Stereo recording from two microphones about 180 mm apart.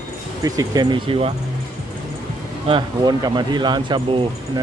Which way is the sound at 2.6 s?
25° right (ahead or behind).